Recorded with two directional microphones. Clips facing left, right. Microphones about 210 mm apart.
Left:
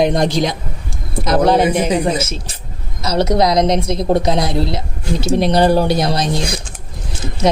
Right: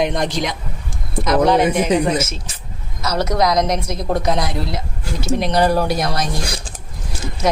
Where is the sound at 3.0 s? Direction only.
25° left (ahead or behind).